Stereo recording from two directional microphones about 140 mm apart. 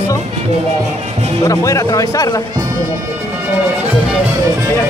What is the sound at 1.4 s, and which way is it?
Speech, 20° left (ahead or behind).